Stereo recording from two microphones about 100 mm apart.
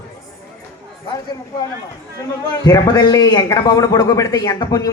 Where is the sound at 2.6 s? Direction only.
40° left (ahead or behind).